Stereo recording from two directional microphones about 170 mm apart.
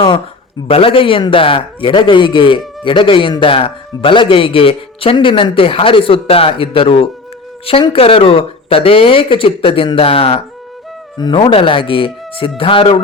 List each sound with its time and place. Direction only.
0.7 s a man's voice: 30° left (ahead or behind)